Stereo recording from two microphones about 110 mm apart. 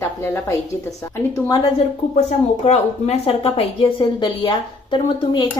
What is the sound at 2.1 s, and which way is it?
A woman's voice, 75° left (ahead or behind).